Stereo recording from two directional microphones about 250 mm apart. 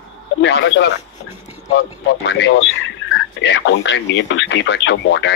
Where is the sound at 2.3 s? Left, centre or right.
Left.